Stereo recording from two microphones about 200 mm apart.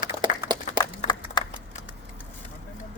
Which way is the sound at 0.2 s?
25° right (ahead or behind).